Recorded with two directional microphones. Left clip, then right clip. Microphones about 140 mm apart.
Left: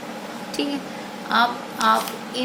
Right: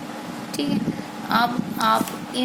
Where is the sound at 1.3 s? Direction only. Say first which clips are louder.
Left 1 dB; 55° right (ahead or behind).